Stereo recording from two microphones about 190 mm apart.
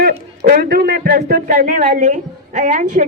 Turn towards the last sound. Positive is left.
turn(degrees=-40)  # may be behind; listen again after turning